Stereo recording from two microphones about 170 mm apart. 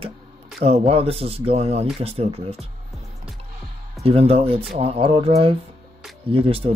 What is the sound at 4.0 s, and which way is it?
Speech, 35° right (ahead or behind).